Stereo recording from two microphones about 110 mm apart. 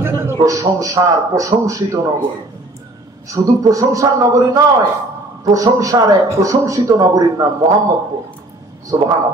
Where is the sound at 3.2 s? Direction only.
30° right (ahead or behind).